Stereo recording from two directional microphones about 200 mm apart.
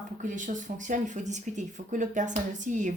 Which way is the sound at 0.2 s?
40° right (ahead or behind).